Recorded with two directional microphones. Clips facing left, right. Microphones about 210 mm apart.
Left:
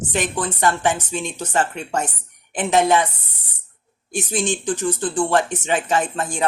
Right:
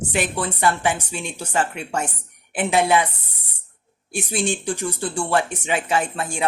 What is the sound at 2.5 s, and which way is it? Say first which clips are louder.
Speech: left 1 dB; 10° right (ahead or behind).